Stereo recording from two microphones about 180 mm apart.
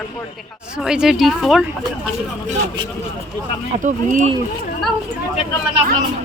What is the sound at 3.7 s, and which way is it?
Speech, 45° right (ahead or behind).